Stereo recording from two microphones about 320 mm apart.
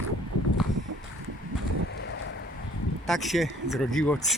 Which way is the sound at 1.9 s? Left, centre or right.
Left.